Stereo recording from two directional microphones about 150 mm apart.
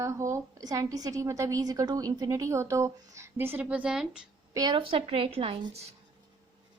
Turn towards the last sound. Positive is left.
turn(degrees=-40)  # may be behind; listen again after turning